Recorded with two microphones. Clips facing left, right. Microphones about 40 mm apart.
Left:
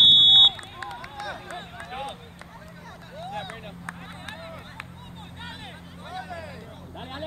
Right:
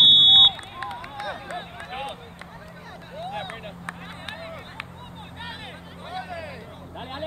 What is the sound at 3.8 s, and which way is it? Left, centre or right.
Vehicle, right.